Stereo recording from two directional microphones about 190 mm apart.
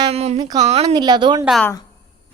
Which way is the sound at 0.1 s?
35° right (ahead or behind).